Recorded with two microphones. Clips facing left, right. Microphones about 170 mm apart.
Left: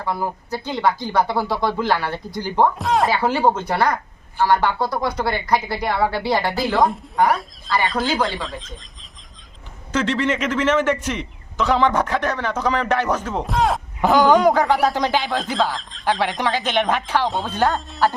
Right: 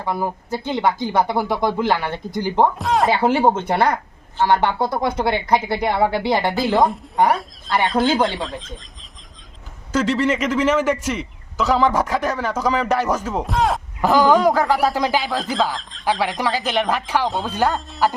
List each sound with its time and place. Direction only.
0.0 s speech: 15° right (ahead or behind)
2.7 s a man's voice: centre (ahead or behind)
3.2 s speech: 20° right (ahead or behind)
6.8 s a man's voice: centre (ahead or behind)
9.9 s a man's voice: 10° right (ahead or behind)